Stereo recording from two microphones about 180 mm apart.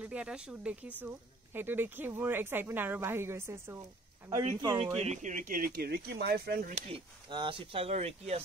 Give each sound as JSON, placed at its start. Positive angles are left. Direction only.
{"t": 0.0, "sound": "speech", "side_deg": -5}
{"t": 5.0, "sound": "speech", "side_deg": -40}
{"t": 6.7, "sound": "speech", "side_deg": -30}